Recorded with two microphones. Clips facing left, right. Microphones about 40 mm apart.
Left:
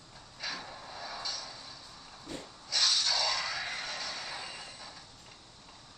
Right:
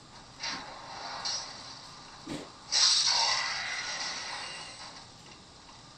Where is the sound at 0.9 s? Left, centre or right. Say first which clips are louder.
Right 2 dB; centre.